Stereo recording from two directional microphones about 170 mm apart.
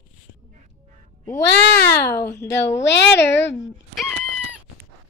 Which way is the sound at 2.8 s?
90° left.